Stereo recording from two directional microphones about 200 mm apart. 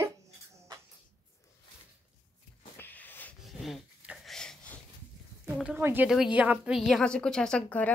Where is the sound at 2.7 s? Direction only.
10° left (ahead or behind).